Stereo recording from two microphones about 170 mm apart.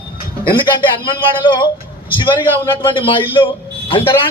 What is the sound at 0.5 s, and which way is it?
A man's voice, 30° left (ahead or behind).